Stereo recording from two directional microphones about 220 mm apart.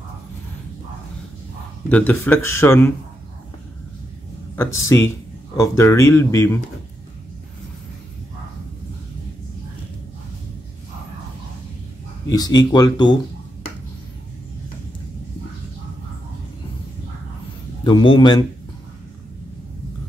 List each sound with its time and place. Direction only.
1.9 s speech: 5° left (ahead or behind)
4.6 s speech: 10° left (ahead or behind)
12.3 s speech: 15° left (ahead or behind)
17.8 s a man's voice: 20° left (ahead or behind)